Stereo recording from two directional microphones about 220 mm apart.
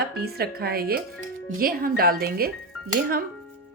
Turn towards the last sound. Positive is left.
turn(degrees=-40)  # may be behind; listen again after turning